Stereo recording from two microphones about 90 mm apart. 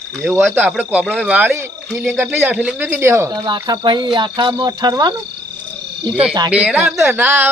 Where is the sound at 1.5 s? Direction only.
30° right (ahead or behind); by 2.9 s 10° right (ahead or behind).